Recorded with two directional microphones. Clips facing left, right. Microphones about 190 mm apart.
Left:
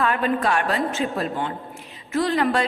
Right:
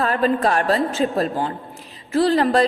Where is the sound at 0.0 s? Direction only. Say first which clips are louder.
Right 3 dB; 35° right (ahead or behind).